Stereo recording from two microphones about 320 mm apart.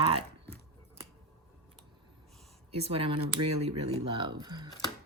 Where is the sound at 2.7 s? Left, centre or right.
Centre.